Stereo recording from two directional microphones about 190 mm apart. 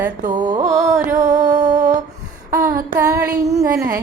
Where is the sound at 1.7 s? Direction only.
40° right (ahead or behind).